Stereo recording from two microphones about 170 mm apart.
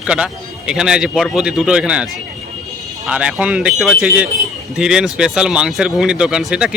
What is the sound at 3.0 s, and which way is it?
Speech, 5° right (ahead or behind).